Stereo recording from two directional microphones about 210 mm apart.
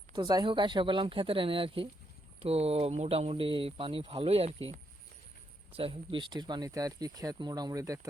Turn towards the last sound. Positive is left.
turn(degrees=-15)  # may be behind; listen again after turning